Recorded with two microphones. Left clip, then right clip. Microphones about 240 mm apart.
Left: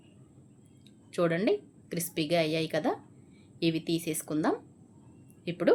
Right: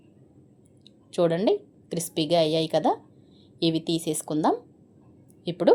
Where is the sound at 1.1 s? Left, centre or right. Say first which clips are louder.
Right 5 dB; centre.